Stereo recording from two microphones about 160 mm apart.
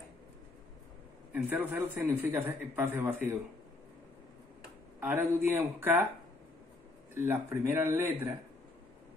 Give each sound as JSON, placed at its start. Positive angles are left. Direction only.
{"t": 1.3, "sound": "a man's voice", "side_deg": -10}
{"t": 5.0, "sound": "a man's voice", "side_deg": -15}
{"t": 7.2, "sound": "a man's voice", "side_deg": -15}